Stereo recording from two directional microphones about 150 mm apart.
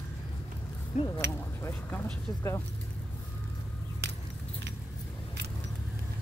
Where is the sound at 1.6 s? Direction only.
15° left (ahead or behind).